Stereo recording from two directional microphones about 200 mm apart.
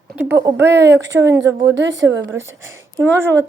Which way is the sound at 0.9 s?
60° right (ahead or behind).